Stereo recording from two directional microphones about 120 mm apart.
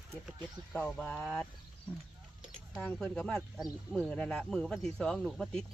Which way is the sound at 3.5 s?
5° right (ahead or behind).